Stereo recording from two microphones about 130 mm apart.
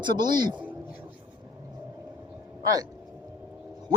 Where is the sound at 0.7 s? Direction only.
15° right (ahead or behind).